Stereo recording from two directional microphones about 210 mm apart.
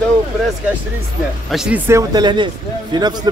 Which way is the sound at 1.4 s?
5° right (ahead or behind).